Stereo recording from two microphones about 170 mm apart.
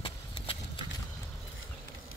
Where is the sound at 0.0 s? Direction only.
30° left (ahead or behind).